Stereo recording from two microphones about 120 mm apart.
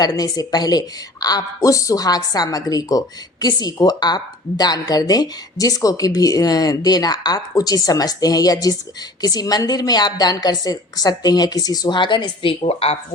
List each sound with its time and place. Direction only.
0.0 s a woman's voice: 35° left (ahead or behind); by 13.0 s 55° left (ahead or behind)